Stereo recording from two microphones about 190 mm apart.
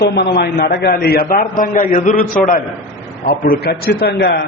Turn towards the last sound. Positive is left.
turn(degrees=55)  # may be behind; listen again after turning